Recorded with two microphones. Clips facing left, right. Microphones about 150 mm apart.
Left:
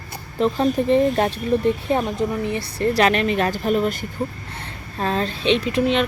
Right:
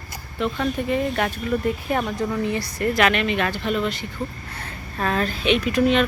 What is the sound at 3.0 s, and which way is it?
Speech, 35° left (ahead or behind).